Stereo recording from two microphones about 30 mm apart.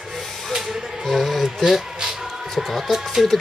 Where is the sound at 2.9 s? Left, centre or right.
Centre.